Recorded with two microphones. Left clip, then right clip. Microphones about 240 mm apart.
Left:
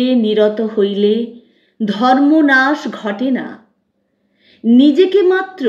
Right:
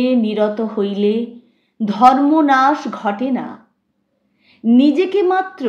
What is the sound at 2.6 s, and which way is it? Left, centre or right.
Speech, right.